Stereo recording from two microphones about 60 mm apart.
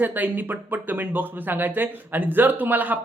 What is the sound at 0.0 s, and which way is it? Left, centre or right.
Speech, right.